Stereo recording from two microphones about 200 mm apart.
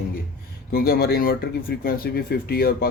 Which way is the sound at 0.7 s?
50° left (ahead or behind).